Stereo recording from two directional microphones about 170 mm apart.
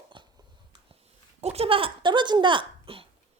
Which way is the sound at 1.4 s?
35° right (ahead or behind).